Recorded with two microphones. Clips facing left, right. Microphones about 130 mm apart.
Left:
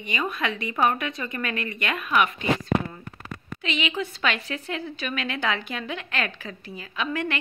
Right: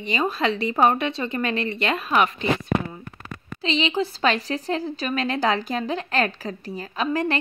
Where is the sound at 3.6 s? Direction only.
30° right (ahead or behind).